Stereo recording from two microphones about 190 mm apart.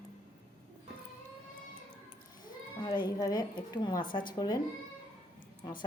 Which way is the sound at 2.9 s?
20° left (ahead or behind).